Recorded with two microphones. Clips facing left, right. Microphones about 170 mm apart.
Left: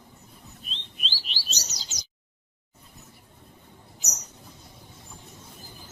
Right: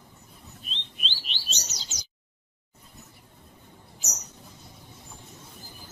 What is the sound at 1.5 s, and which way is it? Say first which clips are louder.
Bird: even; 35° left (ahead or behind).